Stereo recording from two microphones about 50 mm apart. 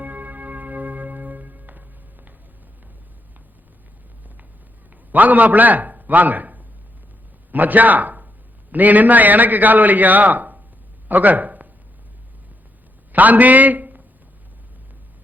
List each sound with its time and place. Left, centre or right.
0.0 s music: right
5.1 s a man's voice: right
13.1 s a man's voice: right